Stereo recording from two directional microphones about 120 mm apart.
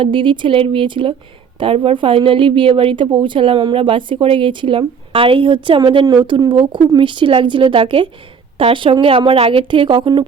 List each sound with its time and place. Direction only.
0.0 s a woman's voice: 45° right (ahead or behind)